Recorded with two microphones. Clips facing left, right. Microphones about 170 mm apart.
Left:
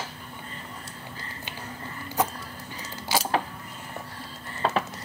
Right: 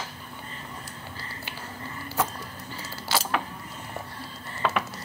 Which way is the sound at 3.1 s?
15° left (ahead or behind).